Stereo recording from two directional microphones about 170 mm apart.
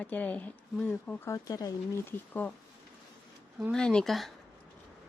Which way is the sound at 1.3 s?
20° left (ahead or behind).